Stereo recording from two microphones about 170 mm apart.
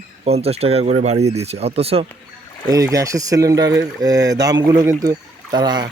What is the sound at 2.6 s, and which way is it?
Speech, 20° right (ahead or behind).